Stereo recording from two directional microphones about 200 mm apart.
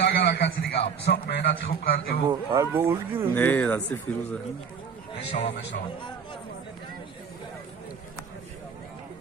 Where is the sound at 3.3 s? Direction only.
10° left (ahead or behind).